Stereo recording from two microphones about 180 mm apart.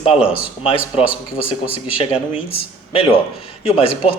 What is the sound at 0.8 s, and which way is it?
Speech, 5° right (ahead or behind).